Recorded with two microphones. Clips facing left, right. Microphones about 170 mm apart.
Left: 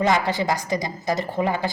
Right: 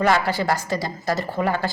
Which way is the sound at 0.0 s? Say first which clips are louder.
Right 1 dB; 20° left (ahead or behind).